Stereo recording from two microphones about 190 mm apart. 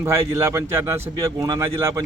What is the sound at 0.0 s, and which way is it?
Speech, 15° right (ahead or behind).